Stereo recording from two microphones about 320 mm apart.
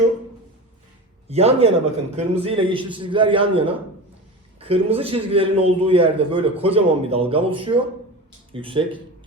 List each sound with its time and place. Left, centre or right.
1.3 s a man's voice: centre